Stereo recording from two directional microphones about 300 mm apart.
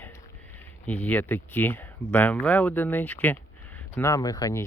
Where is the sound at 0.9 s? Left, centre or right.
Centre.